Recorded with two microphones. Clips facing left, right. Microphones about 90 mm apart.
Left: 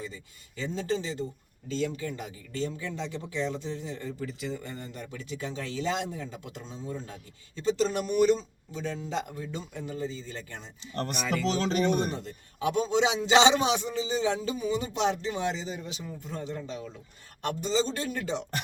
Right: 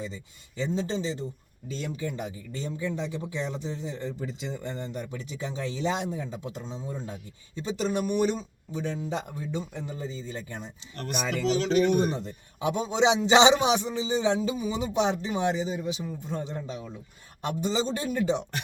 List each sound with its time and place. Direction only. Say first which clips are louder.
0.0 s speech: right 3 dB; 20° right (ahead or behind)
11.4 s speech: right 5 dB; 40° left (ahead or behind)
12.1 s speech: right 2 dB; 20° right (ahead or behind)